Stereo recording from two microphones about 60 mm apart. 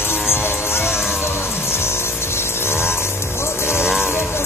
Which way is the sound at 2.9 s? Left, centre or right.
Left.